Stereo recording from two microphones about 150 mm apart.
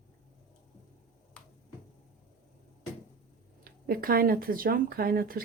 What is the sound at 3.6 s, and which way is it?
Speech, 80° right.